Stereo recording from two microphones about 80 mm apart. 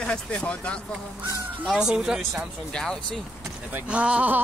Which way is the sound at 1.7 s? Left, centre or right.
Centre.